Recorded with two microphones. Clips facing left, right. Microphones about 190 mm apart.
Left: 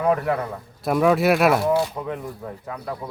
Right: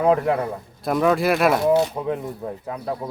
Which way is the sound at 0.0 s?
25° right (ahead or behind).